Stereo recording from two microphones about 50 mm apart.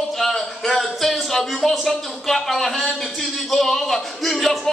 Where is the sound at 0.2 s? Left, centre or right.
Centre.